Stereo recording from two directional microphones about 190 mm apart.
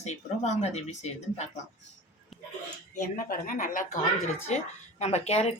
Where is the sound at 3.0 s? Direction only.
45° left (ahead or behind).